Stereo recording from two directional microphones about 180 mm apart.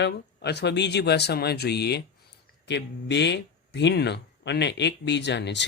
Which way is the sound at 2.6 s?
75° left (ahead or behind).